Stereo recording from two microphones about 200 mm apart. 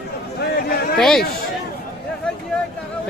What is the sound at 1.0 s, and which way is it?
Speech, centre (ahead or behind).